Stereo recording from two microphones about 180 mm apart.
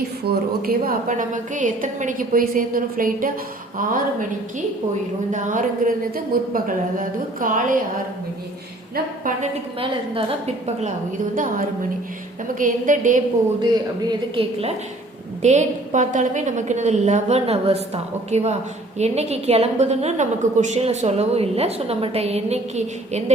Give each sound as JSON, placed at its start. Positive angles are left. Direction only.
{"t": 0.3, "sound": "a woman's voice", "side_deg": -55}
{"t": 9.8, "sound": "a woman's voice", "side_deg": -30}
{"t": 11.3, "sound": "a woman's voice", "side_deg": -50}
{"t": 14.1, "sound": "a woman's voice", "side_deg": -30}
{"t": 15.4, "sound": "a woman's voice", "side_deg": -40}